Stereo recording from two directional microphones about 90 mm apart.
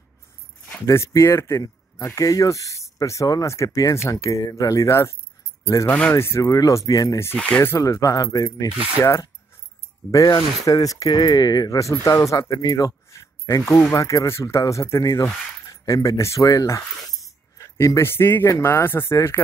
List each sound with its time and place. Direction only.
0.8 s speech: 35° left (ahead or behind)
5.9 s speech: 15° left (ahead or behind)
6.1 s speech: 30° left (ahead or behind)
7.3 s speech: 15° left (ahead or behind)
7.8 s speech: 40° left (ahead or behind)
8.6 s speech: 75° right (ahead or behind)
9.0 s speech: 30° left (ahead or behind)
10.1 s speech: 40° left (ahead or behind)